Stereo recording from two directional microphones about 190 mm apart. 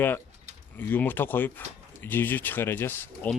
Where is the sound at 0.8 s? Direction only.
10° left (ahead or behind).